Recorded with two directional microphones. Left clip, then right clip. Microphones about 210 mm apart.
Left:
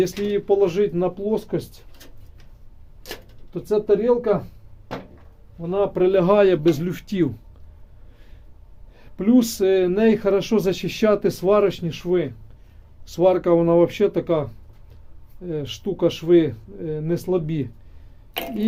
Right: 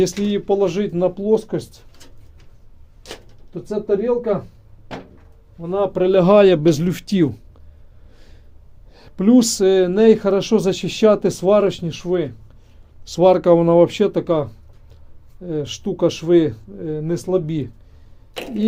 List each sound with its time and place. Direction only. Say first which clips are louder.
0.0 s a man's voice: right 2 dB; 35° right (ahead or behind)
3.5 s speech: left 1 dB; 15° right (ahead or behind)
5.5 s a man's voice: right 2 dB; 20° right (ahead or behind)
8.9 s speech: right 4 dB; 35° right (ahead or behind); by 12.3 s 20° right (ahead or behind)
13.1 s a man's voice: right 5 dB; 35° right (ahead or behind); by 17.7 s 20° right (ahead or behind)